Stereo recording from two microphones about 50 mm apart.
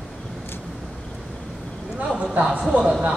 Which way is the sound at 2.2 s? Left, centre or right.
Right.